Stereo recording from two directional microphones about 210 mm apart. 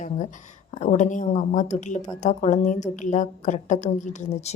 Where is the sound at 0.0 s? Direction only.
35° left (ahead or behind).